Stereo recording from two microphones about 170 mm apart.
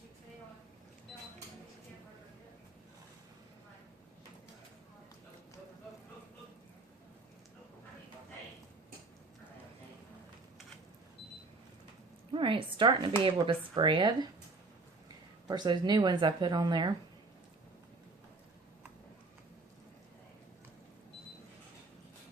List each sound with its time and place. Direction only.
12.3 s a woman's voice: 30° right (ahead or behind)
15.4 s speech: 25° right (ahead or behind)